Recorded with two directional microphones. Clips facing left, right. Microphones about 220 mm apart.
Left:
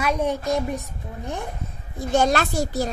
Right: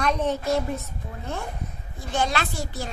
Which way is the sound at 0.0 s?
10° left (ahead or behind).